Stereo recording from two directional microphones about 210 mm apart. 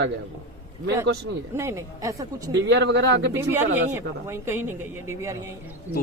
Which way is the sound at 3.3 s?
10° right (ahead or behind).